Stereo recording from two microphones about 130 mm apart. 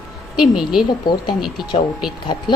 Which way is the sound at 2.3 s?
30° left (ahead or behind).